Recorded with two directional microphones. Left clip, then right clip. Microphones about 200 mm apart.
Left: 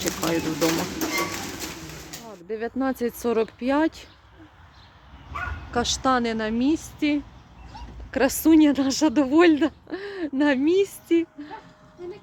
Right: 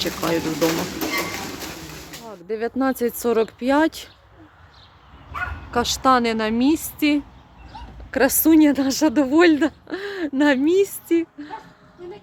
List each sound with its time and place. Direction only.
0.0 s speech: 5° right (ahead or behind)
2.2 s speech: 15° right (ahead or behind)
5.7 s speech: 5° right (ahead or behind)
8.1 s speech: 5° right (ahead or behind)